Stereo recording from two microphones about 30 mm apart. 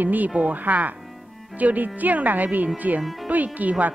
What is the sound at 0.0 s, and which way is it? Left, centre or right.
Speech, right.